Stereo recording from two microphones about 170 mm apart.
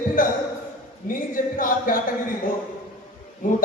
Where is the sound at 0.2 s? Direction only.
55° left (ahead or behind).